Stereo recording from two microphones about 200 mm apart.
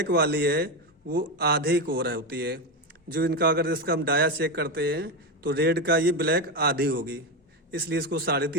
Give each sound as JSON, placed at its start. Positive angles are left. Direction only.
{"t": 0.0, "sound": "a man's voice", "side_deg": -55}